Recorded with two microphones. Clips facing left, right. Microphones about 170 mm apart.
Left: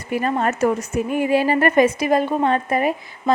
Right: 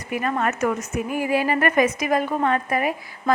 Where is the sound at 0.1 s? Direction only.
30° left (ahead or behind).